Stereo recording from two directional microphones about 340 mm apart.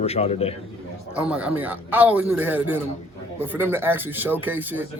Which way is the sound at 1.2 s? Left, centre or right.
Centre.